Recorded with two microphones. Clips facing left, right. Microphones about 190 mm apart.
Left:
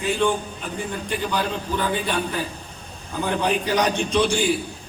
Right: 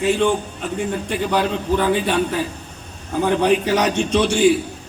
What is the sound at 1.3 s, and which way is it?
Speech, 65° right (ahead or behind).